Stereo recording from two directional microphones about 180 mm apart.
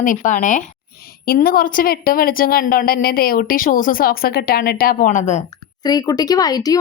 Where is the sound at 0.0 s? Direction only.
45° left (ahead or behind).